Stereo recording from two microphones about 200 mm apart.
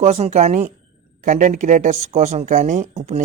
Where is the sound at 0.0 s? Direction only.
35° right (ahead or behind).